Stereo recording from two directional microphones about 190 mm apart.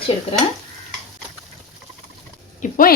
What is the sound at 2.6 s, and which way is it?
Speech, 50° left (ahead or behind).